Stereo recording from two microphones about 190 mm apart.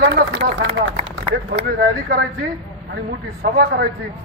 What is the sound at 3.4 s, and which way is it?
Speech, 50° right (ahead or behind).